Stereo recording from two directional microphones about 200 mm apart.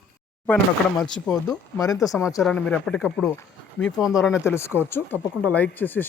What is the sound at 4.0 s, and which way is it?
Speech, 15° left (ahead or behind).